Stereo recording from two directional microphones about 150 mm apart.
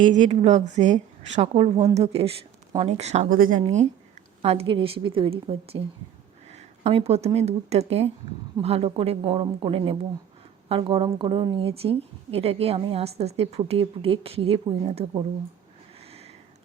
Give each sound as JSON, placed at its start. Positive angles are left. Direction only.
{"t": 0.0, "sound": "a woman's voice", "side_deg": -55}
{"t": 3.2, "sound": "speech", "side_deg": -65}
{"t": 4.4, "sound": "a woman's voice", "side_deg": -35}
{"t": 6.5, "sound": "a sound", "side_deg": -45}
{"t": 7.3, "sound": "a woman's voice", "side_deg": -45}
{"t": 16.0, "sound": "a sound", "side_deg": -40}